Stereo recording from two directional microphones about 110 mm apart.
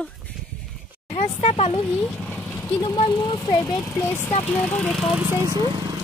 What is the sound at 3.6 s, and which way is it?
Speech, 25° left (ahead or behind).